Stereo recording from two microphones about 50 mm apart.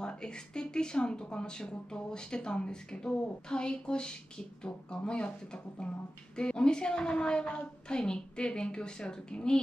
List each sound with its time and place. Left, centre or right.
0.0 s speech: centre